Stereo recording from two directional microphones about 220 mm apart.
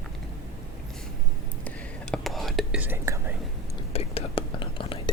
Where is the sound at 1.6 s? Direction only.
Centre (ahead or behind).